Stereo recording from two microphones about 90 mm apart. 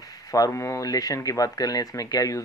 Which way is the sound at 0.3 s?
35° left (ahead or behind).